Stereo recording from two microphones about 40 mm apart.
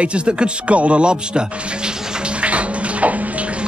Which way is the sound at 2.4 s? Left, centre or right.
Right.